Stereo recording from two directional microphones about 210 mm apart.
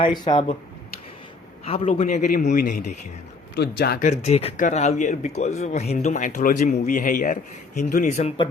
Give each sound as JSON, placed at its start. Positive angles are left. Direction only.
{"t": 0.0, "sound": "speech", "side_deg": 20}
{"t": 1.6, "sound": "speech", "side_deg": 30}
{"t": 3.5, "sound": "speech", "side_deg": 55}
{"t": 4.1, "sound": "speech", "side_deg": 30}